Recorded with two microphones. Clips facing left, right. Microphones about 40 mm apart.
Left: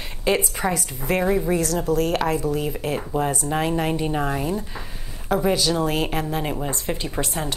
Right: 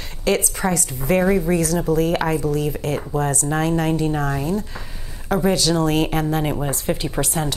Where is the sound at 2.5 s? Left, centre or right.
Centre.